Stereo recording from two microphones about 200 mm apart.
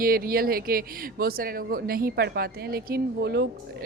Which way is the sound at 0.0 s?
45° right (ahead or behind).